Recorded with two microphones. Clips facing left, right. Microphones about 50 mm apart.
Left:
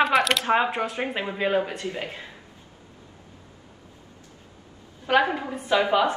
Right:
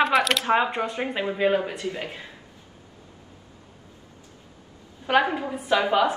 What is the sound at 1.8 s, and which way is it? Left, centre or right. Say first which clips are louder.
Speech: right 1 dB; left.